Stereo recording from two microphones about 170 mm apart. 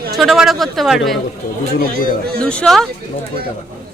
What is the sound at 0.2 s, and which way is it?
Speech, centre (ahead or behind).